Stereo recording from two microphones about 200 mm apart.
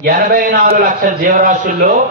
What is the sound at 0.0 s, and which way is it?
A man's voice, 50° right (ahead or behind).